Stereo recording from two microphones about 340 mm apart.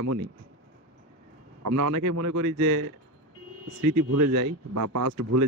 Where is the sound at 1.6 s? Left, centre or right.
Right.